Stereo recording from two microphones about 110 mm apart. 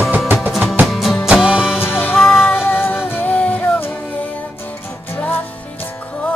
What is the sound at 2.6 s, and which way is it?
Music, 15° left (ahead or behind).